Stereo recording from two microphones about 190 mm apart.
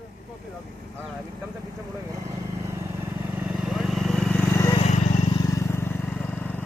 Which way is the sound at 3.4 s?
Centre (ahead or behind).